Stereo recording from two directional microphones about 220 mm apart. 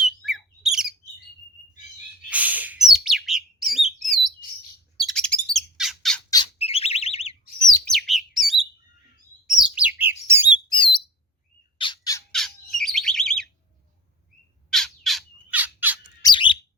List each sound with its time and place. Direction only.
0.2 s bird: centre (ahead or behind)
2.3 s chirp: 5° right (ahead or behind)
4.9 s bird: centre (ahead or behind)
6.3 s bird: 25° left (ahead or behind)
7.9 s bird: centre (ahead or behind)
10.7 s bird: 20° left (ahead or behind)
11.8 s squawk: 20° left (ahead or behind)
12.3 s bird: centre (ahead or behind)
14.7 s bird: centre (ahead or behind)
16.2 s bird: 20° left (ahead or behind)